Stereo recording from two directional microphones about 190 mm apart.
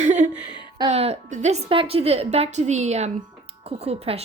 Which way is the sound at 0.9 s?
35° right (ahead or behind).